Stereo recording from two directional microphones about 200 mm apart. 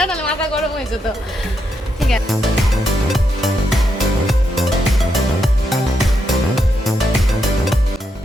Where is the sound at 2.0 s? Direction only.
Centre (ahead or behind).